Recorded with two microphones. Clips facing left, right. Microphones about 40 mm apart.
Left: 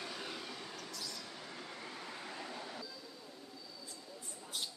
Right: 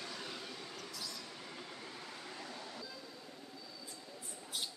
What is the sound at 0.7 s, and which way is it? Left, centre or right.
Train, centre.